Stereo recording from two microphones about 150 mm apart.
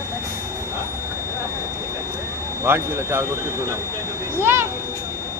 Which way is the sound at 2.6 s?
15° right (ahead or behind).